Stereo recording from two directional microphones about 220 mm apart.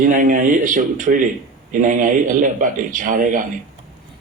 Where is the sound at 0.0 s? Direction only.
35° right (ahead or behind).